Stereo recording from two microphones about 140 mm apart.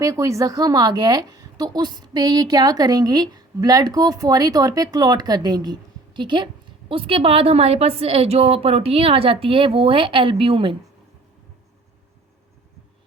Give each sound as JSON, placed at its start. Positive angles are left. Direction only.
{"t": 0.0, "sound": "a woman's voice", "side_deg": -25}